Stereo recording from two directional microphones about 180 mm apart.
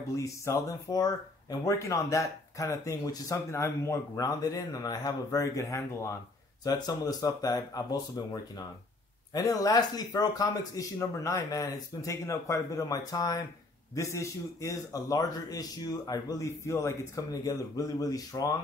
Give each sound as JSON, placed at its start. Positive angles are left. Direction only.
{"t": 0.1, "sound": "a man's voice", "side_deg": 15}